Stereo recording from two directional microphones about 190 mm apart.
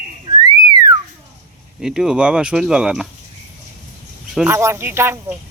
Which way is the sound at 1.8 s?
5° right (ahead or behind).